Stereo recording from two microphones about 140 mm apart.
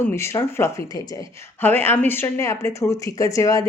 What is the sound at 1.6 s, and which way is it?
Speech, 15° left (ahead or behind).